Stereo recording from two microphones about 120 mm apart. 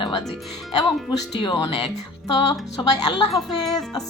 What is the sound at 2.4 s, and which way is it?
Speech, 35° left (ahead or behind).